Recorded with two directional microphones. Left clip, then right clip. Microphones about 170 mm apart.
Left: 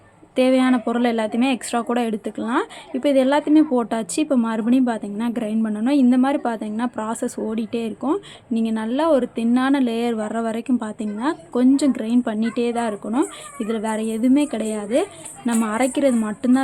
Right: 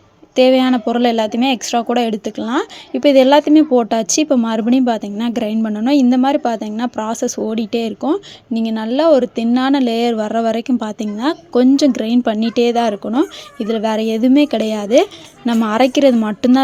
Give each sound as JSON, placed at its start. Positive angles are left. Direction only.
{"t": 0.3, "sound": "speech", "side_deg": -25}